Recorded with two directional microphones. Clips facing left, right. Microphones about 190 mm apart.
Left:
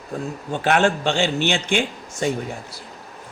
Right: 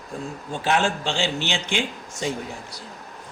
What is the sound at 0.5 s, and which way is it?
A man's voice, 60° left (ahead or behind).